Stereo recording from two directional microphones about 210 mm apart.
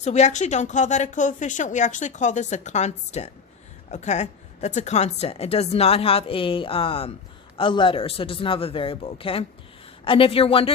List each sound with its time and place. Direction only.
0.0 s a woman's voice: 35° left (ahead or behind)